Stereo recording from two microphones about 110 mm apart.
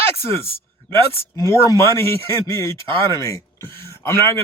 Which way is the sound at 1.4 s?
30° left (ahead or behind).